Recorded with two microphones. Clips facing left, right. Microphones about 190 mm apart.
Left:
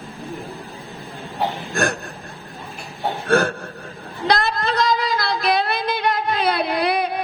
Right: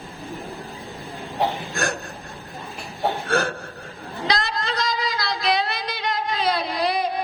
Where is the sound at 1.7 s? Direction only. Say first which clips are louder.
Left 4 dB; 55° left (ahead or behind).